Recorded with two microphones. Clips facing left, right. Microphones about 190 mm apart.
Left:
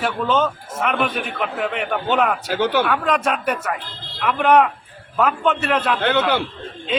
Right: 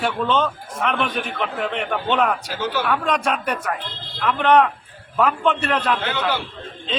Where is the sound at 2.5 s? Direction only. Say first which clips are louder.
Left 5 dB; 65° left (ahead or behind).